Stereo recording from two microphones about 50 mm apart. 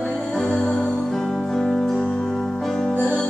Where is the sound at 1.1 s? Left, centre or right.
Centre.